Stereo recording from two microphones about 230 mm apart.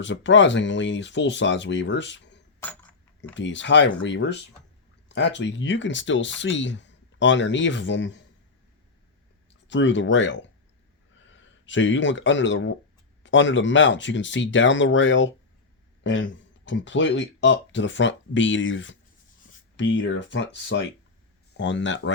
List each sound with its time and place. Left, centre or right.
0.0 s speech: left
2.6 s a sound: centre
3.3 s speech: left
9.6 s speech: left